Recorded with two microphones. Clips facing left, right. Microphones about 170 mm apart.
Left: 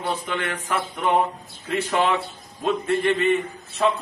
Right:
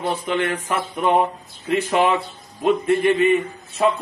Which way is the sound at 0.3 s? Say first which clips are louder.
Right 4 dB; 20° right (ahead or behind).